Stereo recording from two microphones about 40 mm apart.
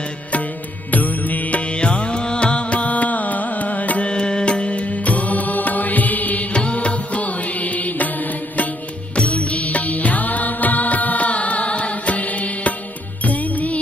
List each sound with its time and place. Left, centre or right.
0.9 s music: left
4.0 s mantra: left
6.5 s music: left